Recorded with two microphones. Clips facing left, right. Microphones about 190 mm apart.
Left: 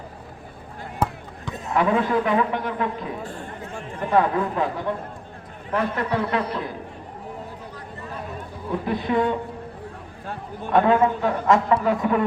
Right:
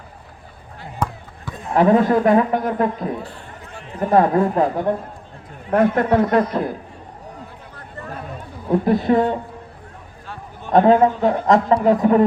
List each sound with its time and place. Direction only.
1.7 s a man's voice: 40° right (ahead or behind)
8.7 s a man's voice: 40° right (ahead or behind)
10.7 s a man's voice: 40° right (ahead or behind)